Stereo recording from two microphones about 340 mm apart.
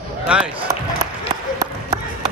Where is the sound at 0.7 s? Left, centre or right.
Centre.